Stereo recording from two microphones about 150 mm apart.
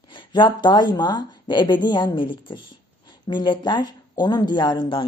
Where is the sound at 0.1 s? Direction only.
30° left (ahead or behind).